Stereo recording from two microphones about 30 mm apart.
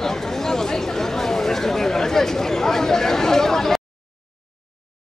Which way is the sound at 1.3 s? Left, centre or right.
Centre.